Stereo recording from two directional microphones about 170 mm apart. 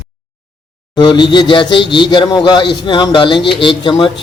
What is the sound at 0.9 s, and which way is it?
Speech, 25° left (ahead or behind).